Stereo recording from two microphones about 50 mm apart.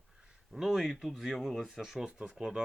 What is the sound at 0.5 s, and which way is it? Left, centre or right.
Speech, centre.